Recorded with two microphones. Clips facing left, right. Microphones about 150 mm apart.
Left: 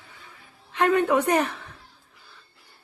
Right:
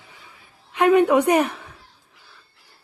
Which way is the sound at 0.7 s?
15° right (ahead or behind).